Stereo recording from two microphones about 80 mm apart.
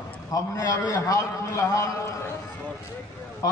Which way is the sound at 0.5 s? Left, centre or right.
Left.